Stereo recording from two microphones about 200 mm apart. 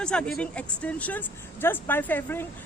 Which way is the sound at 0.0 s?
5° left (ahead or behind).